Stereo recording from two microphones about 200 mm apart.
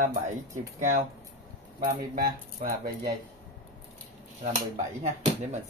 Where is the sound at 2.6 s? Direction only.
40° right (ahead or behind).